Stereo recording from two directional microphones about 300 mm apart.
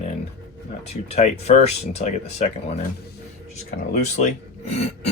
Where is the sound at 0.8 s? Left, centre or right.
Left.